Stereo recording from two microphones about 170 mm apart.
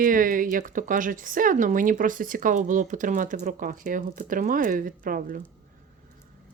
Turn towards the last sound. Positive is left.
turn(degrees=-55)  # may be behind; listen again after turning